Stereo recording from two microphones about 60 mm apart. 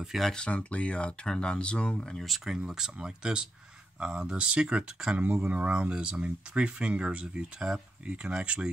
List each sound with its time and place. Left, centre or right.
0.2 s speech: centre
2.2 s speech: centre